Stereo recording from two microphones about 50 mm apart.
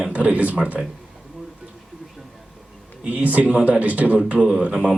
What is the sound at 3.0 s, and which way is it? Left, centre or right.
Speech, right.